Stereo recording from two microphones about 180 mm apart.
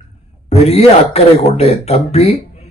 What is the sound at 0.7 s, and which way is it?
Speech, 35° left (ahead or behind).